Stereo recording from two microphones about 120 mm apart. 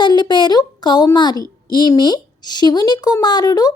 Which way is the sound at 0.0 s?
35° left (ahead or behind).